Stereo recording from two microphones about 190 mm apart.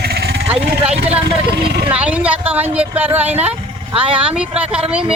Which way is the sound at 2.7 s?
5° right (ahead or behind).